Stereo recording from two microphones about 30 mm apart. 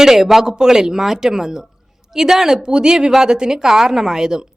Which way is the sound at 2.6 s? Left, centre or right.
Right.